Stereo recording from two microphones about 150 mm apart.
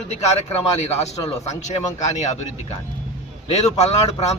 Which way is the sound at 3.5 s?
45° left (ahead or behind).